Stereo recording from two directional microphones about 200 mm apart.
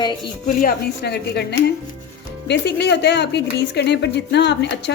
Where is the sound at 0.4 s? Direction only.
45° left (ahead or behind).